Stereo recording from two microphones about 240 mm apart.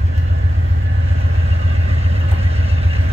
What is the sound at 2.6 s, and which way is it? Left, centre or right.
Vehicle, right.